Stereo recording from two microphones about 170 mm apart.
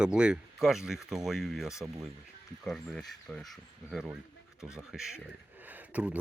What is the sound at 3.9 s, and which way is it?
Speech, centre (ahead or behind).